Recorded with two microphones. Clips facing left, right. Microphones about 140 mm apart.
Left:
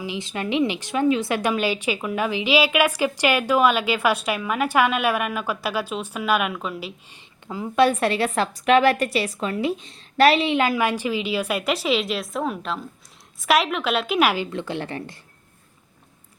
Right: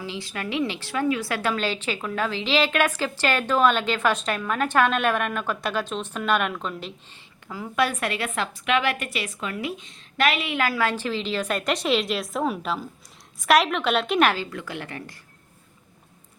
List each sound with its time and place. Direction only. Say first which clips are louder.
0.0 s a woman's voice: left 4 dB; 20° left (ahead or behind)
7.4 s a woman's voice: left 6 dB; 20° left (ahead or behind); by 14.4 s 5° left (ahead or behind)
14.5 s a woman's voice: left 5 dB; 25° left (ahead or behind)